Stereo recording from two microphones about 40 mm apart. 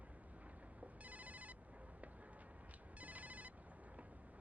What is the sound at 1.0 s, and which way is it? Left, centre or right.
Ringtone, right.